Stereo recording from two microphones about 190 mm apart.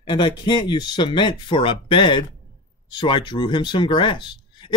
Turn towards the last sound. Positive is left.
turn(degrees=25)  # may be behind; listen again after turning